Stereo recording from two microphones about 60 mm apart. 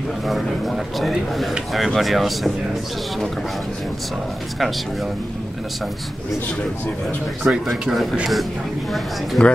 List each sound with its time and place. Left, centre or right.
0.3 s speech: centre
7.4 s speech: centre
7.9 s speech: centre
9.4 s speech: centre